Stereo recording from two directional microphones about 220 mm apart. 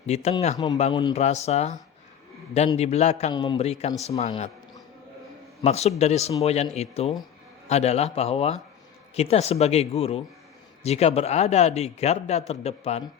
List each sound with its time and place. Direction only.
0.0 s a man's voice: 30° left (ahead or behind)
0.5 s a man's voice: 15° left (ahead or behind)
5.6 s a man's voice: 30° left (ahead or behind)